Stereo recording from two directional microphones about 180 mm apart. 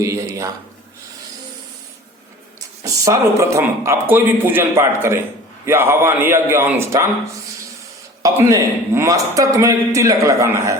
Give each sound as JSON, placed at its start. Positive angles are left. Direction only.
{"t": 0.0, "sound": "a man's voice", "side_deg": -15}
{"t": 2.8, "sound": "a man's voice", "side_deg": -20}
{"t": 8.2, "sound": "a man's voice", "side_deg": -20}